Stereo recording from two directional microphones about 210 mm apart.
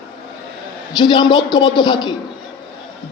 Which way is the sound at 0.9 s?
20° left (ahead or behind).